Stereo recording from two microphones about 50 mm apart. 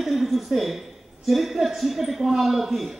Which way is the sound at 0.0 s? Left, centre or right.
Centre.